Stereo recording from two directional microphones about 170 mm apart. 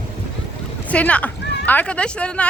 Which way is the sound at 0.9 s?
10° left (ahead or behind).